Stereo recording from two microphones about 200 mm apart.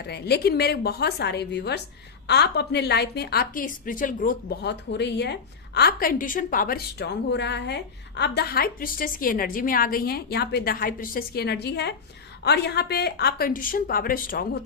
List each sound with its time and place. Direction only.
0.0 s a woman's voice: 55° left (ahead or behind)